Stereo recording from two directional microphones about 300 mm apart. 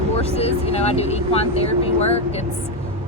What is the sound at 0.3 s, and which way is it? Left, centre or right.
Speech, centre.